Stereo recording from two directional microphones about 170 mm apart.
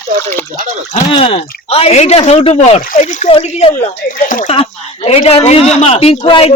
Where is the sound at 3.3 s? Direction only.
35° left (ahead or behind).